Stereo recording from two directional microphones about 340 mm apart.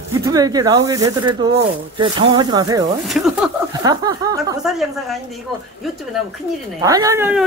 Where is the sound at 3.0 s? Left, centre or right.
Centre.